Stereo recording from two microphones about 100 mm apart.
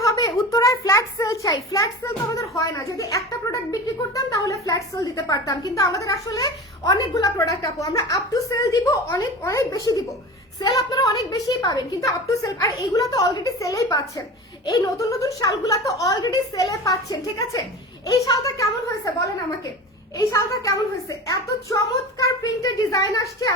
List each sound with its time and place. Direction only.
0.0 s a sound: 35° left (ahead or behind)
1.7 s speech: 35° left (ahead or behind)
20.1 s speech: 35° left (ahead or behind)